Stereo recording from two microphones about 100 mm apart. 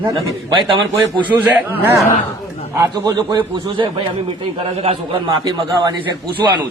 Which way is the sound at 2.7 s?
35° right (ahead or behind).